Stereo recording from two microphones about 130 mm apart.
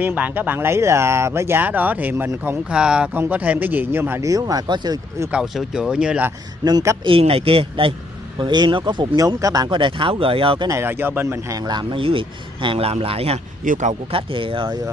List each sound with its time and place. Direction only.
0.0 s speech: 15° right (ahead or behind); by 5.3 s 30° right (ahead or behind)
5.3 s speech: 5° right (ahead or behind)
6.6 s speech: 25° right (ahead or behind)
7.1 s speech: 45° right (ahead or behind)
10.7 s speech: 15° right (ahead or behind)
11.5 s speech: 35° right (ahead or behind); by 13.4 s 50° right (ahead or behind)
13.7 s speech: 70° right (ahead or behind)
14.1 s speech: 40° right (ahead or behind)